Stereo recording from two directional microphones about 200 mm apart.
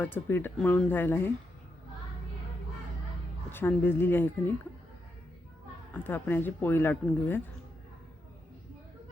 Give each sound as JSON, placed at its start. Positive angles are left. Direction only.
{"t": 0.0, "sound": "speech", "side_deg": 10}
{"t": 3.5, "sound": "speech", "side_deg": 10}
{"t": 5.9, "sound": "speech", "side_deg": 10}